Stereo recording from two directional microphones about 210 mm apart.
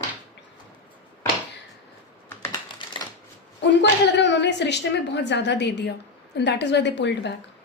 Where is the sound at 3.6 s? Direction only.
55° left (ahead or behind).